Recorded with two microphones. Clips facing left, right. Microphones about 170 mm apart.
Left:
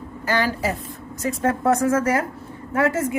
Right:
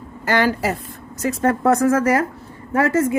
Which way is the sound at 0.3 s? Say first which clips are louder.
Right 4 dB; 70° right (ahead or behind).